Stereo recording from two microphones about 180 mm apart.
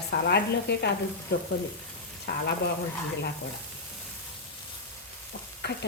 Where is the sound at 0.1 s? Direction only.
65° left (ahead or behind).